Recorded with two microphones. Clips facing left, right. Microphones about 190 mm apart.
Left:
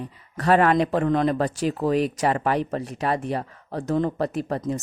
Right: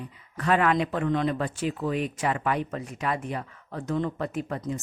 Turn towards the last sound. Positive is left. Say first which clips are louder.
# left 5 dB
turn(degrees=40)  # may be behind; listen again after turning